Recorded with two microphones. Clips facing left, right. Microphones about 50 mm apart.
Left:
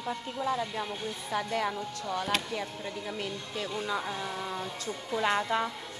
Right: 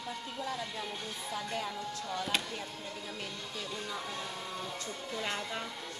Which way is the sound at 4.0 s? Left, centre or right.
Left.